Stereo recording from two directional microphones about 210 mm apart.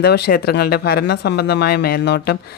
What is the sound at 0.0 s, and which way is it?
Speech, 50° left (ahead or behind).